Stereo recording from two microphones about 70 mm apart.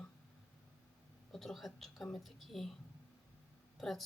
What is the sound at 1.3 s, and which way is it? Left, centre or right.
A woman's voice, centre.